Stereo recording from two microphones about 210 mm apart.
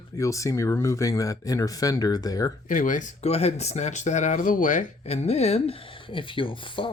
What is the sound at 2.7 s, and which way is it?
Speech, 40° left (ahead or behind).